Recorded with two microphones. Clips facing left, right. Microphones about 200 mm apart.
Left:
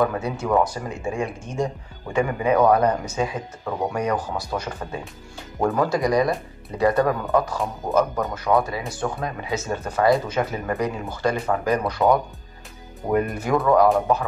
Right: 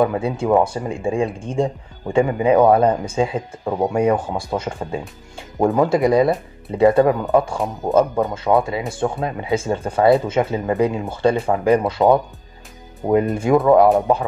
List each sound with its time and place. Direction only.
0.0 s speech: 25° right (ahead or behind)